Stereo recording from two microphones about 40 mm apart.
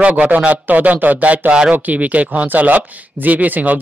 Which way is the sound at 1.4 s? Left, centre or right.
Right.